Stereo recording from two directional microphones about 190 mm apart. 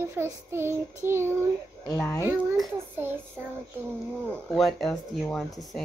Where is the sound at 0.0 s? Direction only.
10° right (ahead or behind).